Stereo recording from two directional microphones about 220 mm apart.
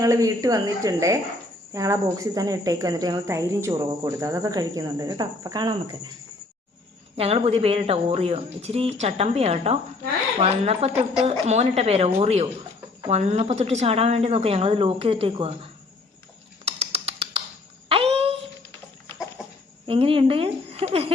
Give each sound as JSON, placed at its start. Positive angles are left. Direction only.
{"t": 0.0, "sound": "a woman's voice", "side_deg": -15}
{"t": 7.2, "sound": "speech", "side_deg": -25}
{"t": 16.6, "sound": "a sound", "side_deg": -25}
{"t": 19.4, "sound": "chicken", "side_deg": -5}
{"t": 19.9, "sound": "speech", "side_deg": -25}